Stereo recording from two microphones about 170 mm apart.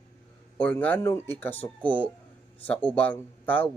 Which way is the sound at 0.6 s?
10° left (ahead or behind).